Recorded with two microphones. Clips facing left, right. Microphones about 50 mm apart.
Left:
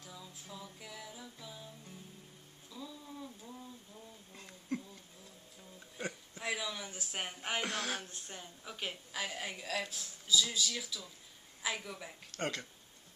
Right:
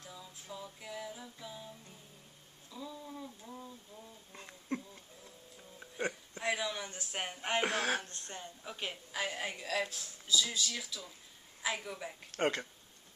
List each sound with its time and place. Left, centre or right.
0.1 s music: centre
2.7 s a sound: centre
5.8 s speech: centre
7.6 s speech: right
8.0 s a woman's voice: centre